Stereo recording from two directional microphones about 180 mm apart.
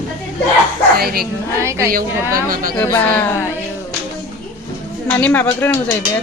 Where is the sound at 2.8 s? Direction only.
10° left (ahead or behind).